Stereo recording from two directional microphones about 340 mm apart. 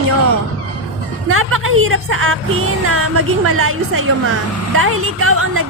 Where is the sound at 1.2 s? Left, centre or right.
Right.